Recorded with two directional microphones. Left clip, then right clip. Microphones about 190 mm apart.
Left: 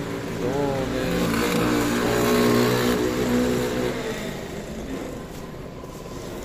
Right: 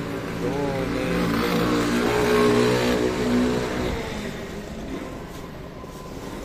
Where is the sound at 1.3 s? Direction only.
30° left (ahead or behind).